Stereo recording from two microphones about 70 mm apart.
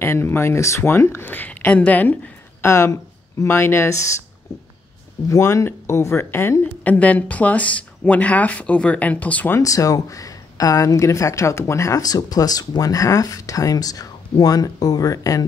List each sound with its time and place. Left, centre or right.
0.0 s speech: left
2.6 s speech: left
5.3 s speech: left
6.6 s speech: left
9.6 s a woman's voice: left